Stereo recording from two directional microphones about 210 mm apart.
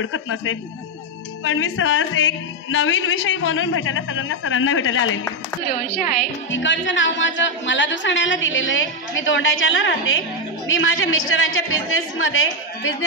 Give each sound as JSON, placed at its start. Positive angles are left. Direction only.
{"t": 0.0, "sound": "speech", "side_deg": 70}
{"t": 6.5, "sound": "a woman's voice", "side_deg": 60}